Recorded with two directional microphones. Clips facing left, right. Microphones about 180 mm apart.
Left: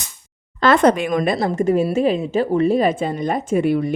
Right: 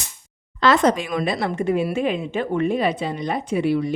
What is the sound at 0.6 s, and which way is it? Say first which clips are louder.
Speech: left 3 dB; 55° left (ahead or behind).